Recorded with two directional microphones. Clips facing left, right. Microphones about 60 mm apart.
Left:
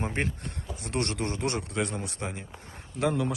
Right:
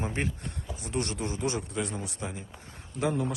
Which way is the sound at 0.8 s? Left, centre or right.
Left.